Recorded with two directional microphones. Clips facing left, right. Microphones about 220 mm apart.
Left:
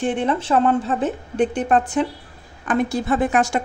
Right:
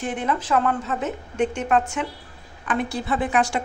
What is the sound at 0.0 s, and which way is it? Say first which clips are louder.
A woman's voice: left 5 dB; 30° left (ahead or behind).